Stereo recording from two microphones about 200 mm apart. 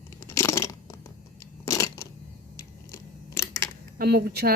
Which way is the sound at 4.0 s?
50° right (ahead or behind).